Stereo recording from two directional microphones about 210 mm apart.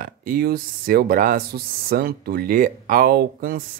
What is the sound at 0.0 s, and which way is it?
Speech, 40° right (ahead or behind).